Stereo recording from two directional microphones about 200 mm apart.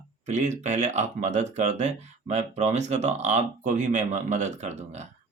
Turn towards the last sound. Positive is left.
turn(degrees=-35)  # may be behind; listen again after turning